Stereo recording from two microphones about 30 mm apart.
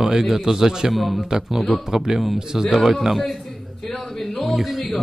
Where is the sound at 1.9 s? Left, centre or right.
Centre.